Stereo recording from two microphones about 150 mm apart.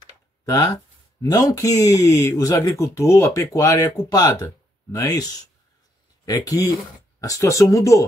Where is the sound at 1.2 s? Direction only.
25° left (ahead or behind).